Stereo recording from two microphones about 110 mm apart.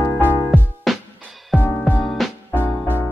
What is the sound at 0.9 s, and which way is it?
Music, centre (ahead or behind).